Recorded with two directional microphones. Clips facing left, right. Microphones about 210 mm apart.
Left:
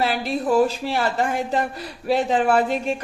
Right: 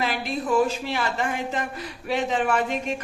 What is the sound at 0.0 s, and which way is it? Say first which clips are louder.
A woman's voice: left 4 dB; 40° left (ahead or behind).